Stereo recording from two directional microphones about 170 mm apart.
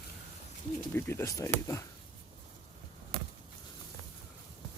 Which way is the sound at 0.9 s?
15° left (ahead or behind).